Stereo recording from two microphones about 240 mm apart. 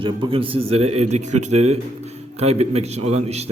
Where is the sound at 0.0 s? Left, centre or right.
Right.